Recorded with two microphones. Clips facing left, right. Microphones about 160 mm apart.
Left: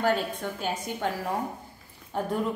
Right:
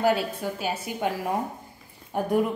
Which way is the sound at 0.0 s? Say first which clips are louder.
Right 3 dB; 10° right (ahead or behind).